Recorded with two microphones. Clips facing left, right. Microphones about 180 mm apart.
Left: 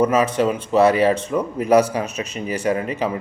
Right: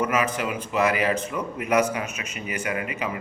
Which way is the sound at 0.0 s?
35° left (ahead or behind).